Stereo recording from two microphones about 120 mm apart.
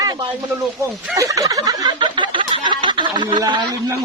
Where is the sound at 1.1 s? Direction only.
25° right (ahead or behind).